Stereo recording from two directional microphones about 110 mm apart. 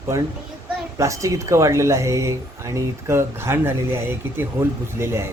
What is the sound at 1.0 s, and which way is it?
Speech, 30° right (ahead or behind).